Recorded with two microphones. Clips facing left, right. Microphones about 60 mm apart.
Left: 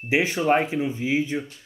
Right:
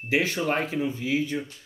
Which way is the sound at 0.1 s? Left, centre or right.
Centre.